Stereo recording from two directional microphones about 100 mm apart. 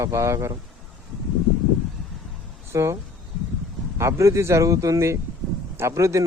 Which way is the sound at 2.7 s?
30° right (ahead or behind).